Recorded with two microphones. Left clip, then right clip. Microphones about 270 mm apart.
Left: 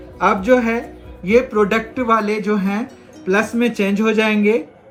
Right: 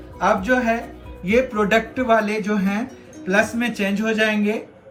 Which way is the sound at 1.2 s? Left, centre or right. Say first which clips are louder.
Left 4 dB; centre.